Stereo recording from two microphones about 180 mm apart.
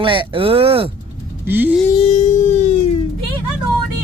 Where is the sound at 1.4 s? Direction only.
10° right (ahead or behind).